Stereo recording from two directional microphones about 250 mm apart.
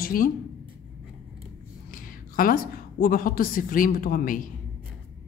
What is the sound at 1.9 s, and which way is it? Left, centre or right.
A woman's voice, left.